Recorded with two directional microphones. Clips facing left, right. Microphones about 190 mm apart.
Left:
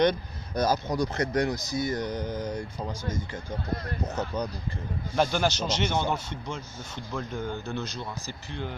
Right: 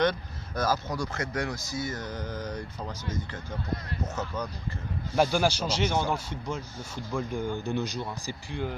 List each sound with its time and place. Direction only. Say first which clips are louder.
0.0 s speech: left 3 dB; 15° left (ahead or behind)
3.7 s speech: left 2 dB; 35° left (ahead or behind)
5.1 s a man's voice: right 1 dB; 10° right (ahead or behind)